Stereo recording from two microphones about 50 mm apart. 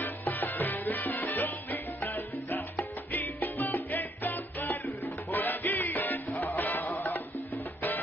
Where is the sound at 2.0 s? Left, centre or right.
Left.